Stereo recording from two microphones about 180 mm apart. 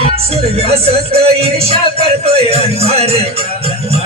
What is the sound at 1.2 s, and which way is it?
Music, 35° right (ahead or behind).